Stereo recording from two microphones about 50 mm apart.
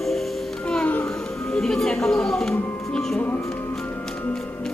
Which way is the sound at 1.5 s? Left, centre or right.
Centre.